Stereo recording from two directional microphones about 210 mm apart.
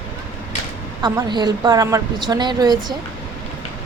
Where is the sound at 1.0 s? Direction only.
20° right (ahead or behind).